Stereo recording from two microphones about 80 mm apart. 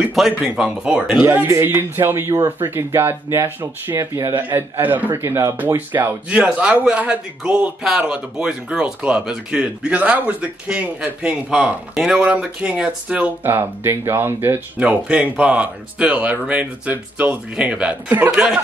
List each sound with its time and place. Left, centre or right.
0.1 s speech: centre
1.2 s speech: right
3.4 s speech: right
4.4 s speech: right
5.8 s speech: right
11.9 s speech: centre
12.2 s speech: centre
13.5 s speech: right
14.8 s speech: centre